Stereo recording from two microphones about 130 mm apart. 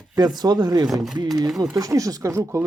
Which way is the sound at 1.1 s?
30° right (ahead or behind).